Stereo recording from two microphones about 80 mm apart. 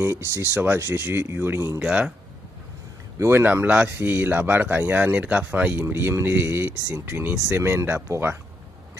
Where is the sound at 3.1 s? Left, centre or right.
Right.